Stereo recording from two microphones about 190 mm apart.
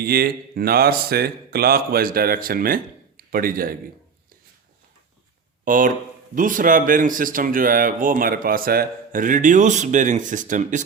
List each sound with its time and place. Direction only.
0.0 s speech: 55° right (ahead or behind)
5.6 s speech: 45° right (ahead or behind)